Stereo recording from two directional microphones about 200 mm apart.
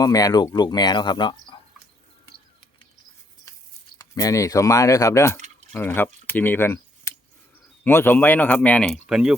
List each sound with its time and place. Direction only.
0.0 s speech: 20° left (ahead or behind)
4.1 s speech: 15° left (ahead or behind)
6.2 s a sound: 10° left (ahead or behind)
7.9 s speech: 10° left (ahead or behind)